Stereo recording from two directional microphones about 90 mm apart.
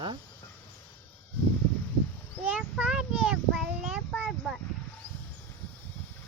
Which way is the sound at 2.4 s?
15° right (ahead or behind).